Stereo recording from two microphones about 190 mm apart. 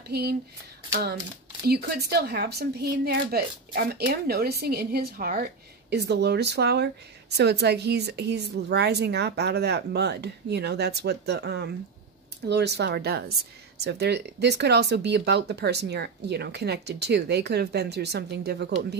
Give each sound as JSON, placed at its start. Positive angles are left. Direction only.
{"t": 0.1, "sound": "a woman's voice", "side_deg": -55}
{"t": 1.7, "sound": "a woman's voice", "side_deg": -55}